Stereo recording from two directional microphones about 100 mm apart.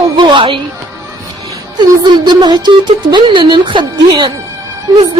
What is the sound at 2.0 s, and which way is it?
A woman's voice, 45° right (ahead or behind).